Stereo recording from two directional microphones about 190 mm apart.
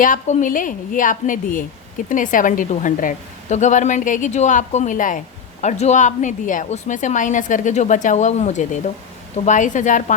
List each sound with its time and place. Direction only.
0.0 s a woman's voice: 40° left (ahead or behind)